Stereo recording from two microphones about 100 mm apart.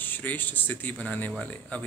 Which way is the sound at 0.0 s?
20° left (ahead or behind).